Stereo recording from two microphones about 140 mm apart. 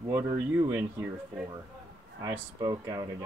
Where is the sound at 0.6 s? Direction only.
15° right (ahead or behind).